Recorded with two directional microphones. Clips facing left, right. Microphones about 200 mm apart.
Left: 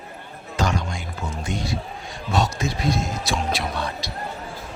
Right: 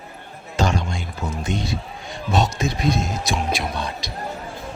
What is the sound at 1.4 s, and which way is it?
A man's voice, 20° right (ahead or behind).